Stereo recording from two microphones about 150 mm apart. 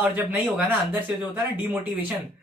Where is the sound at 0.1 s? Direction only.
15° right (ahead or behind).